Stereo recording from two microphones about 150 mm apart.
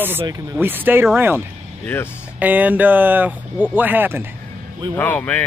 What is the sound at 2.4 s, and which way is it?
Speech, 10° right (ahead or behind).